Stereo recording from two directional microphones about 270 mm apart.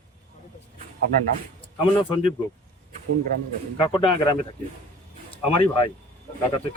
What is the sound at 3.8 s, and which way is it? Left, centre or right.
Speech, centre.